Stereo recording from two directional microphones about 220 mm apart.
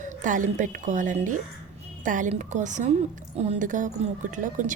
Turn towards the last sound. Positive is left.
turn(degrees=-35)  # may be behind; listen again after turning